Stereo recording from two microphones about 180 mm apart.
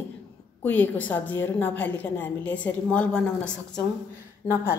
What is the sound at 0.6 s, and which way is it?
A woman's voice, 10° left (ahead or behind).